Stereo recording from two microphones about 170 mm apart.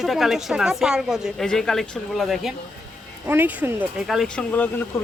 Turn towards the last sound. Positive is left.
turn(degrees=10)  # may be behind; listen again after turning